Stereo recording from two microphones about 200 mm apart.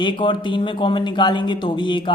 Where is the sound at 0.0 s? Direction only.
25° left (ahead or behind).